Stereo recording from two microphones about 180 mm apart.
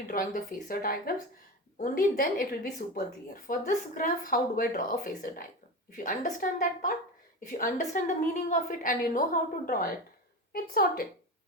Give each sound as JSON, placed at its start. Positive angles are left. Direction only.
{"t": 0.1, "sound": "a woman's voice", "side_deg": 50}